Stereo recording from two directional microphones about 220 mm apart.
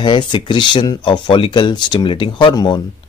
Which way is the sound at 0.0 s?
20° left (ahead or behind).